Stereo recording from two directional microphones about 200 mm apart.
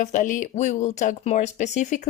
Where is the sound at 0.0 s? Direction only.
40° left (ahead or behind).